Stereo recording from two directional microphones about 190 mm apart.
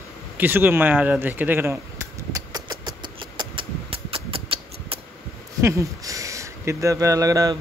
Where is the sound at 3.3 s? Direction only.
30° right (ahead or behind).